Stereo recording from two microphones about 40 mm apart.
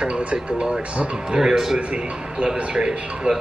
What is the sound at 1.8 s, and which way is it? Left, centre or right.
Speech, right.